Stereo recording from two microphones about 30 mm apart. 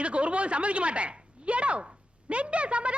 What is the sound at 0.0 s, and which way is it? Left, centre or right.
A woman's voice, right.